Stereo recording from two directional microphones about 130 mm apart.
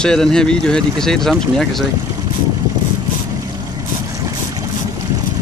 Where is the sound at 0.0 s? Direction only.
5° left (ahead or behind).